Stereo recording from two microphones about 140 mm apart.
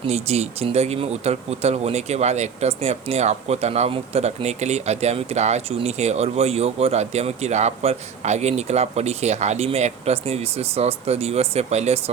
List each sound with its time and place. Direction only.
0.0 s speech: 45° right (ahead or behind)